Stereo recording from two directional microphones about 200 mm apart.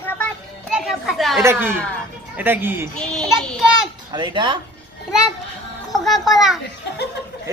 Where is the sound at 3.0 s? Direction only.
5° left (ahead or behind).